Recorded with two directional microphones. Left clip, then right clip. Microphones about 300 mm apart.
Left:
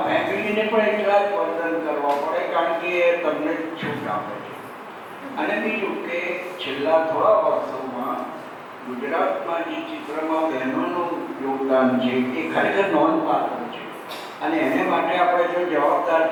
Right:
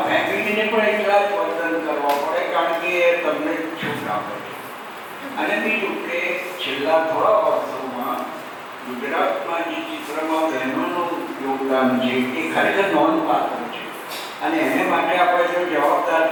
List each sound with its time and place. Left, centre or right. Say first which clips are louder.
0.0 s a sound: right 2 dB; centre
5.4 s a man's voice: right 3 dB; centre
9.0 s a man's voice: right 1 dB; centre
13.1 s a man's voice: right 2 dB; left
14.4 s a man's voice: right 1 dB; centre